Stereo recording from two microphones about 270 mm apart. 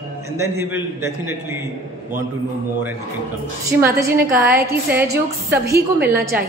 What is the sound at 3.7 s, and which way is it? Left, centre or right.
A woman's voice, right.